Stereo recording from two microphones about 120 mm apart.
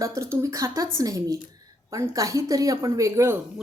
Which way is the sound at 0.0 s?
25° right (ahead or behind).